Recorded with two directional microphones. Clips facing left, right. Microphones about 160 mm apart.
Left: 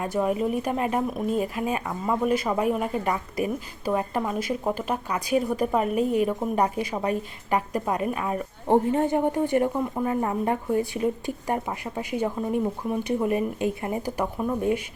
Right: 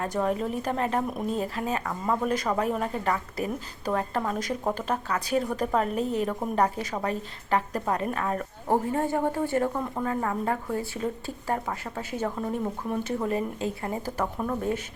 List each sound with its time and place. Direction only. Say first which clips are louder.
0.0 s speech: left 3 dB; 10° left (ahead or behind)
8.6 s speech: left 5 dB; 20° left (ahead or behind)